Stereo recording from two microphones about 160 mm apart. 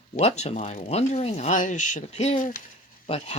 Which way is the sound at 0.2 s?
40° left (ahead or behind).